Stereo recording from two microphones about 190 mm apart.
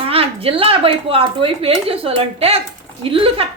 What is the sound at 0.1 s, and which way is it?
A woman's voice, 30° right (ahead or behind).